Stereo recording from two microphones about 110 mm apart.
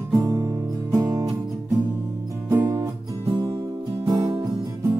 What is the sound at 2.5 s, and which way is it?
Music, 25° right (ahead or behind).